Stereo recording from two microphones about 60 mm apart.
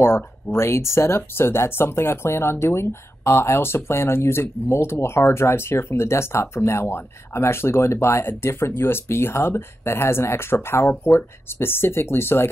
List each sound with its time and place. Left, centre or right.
0.0 s speech: left